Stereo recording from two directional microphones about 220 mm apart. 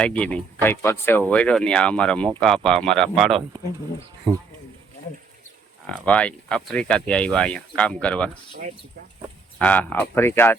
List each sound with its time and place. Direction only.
0.0 s speech: 5° left (ahead or behind)
4.3 s speech: 20° right (ahead or behind)
6.1 s speech: 5° left (ahead or behind)
9.6 s speech: 5° left (ahead or behind)